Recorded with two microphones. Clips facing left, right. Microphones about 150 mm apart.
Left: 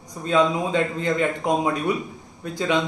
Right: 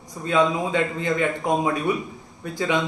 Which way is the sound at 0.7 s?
20° right (ahead or behind).